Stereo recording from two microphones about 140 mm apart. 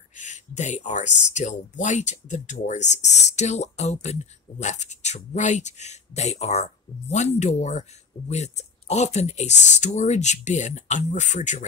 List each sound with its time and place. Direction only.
0.1 s speech: 60° left (ahead or behind)